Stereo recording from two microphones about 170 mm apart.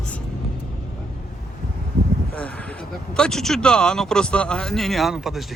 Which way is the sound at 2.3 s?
10° left (ahead or behind).